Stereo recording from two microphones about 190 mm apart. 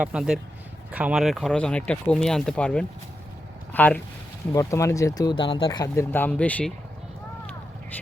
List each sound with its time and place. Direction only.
0.0 s speech: 5° right (ahead or behind)